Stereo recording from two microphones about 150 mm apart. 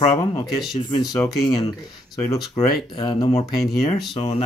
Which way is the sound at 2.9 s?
30° left (ahead or behind).